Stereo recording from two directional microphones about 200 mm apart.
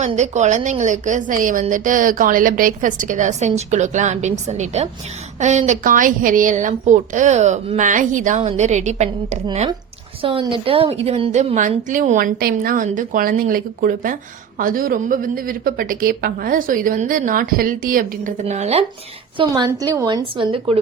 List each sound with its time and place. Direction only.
0.0 s a woman's voice: 35° right (ahead or behind)